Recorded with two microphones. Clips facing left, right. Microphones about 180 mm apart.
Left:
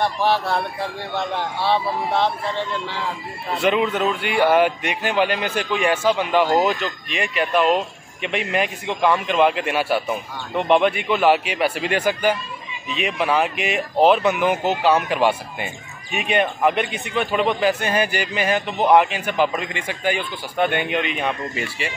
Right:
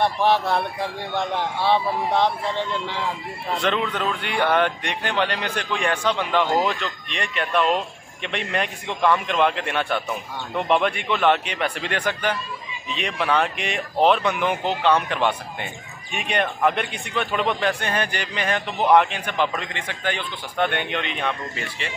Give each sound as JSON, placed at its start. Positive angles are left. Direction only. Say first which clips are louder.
{"t": 0.0, "sound": "speech", "louder": "even", "side_deg": -20}
{"t": 3.5, "sound": "speech", "louder": "left 5 dB", "side_deg": 10}